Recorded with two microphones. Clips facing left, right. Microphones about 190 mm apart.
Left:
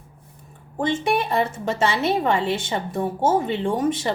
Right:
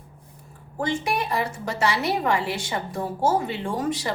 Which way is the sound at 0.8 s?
25° left (ahead or behind).